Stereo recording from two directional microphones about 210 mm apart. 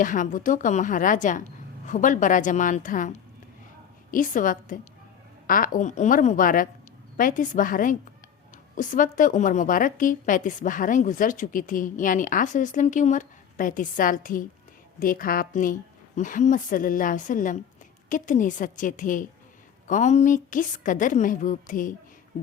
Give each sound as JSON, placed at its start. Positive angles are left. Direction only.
{"t": 0.0, "sound": "a woman's voice", "side_deg": 40}